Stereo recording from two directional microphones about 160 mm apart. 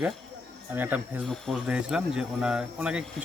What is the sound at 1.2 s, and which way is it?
Speech, centre (ahead or behind).